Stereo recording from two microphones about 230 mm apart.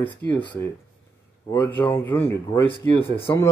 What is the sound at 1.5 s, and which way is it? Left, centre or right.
Speech, centre.